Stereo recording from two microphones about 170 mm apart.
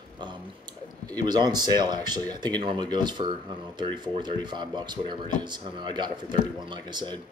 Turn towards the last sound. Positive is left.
turn(degrees=-25)  # may be behind; listen again after turning